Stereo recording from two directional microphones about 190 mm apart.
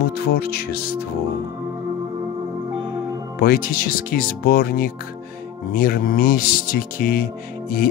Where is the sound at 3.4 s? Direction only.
50° left (ahead or behind).